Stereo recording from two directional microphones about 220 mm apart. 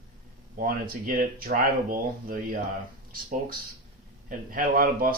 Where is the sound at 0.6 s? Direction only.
40° right (ahead or behind).